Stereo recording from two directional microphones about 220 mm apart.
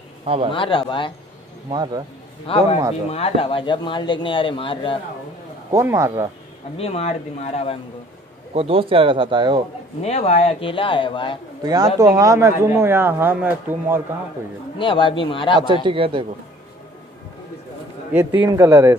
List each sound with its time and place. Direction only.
0.2 s speech: 25° right (ahead or behind)
0.5 s speech: 20° left (ahead or behind)
1.7 s speech: 20° right (ahead or behind)
2.4 s speech: 25° left (ahead or behind)
5.7 s speech: 15° right (ahead or behind)
6.8 s speech: 30° left (ahead or behind)
8.5 s speech: 25° right (ahead or behind)
10.0 s speech: 30° left (ahead or behind)
11.6 s speech: 15° right (ahead or behind)
14.8 s speech: 20° left (ahead or behind)
15.6 s speech: 20° right (ahead or behind)
18.5 s speech: 15° right (ahead or behind)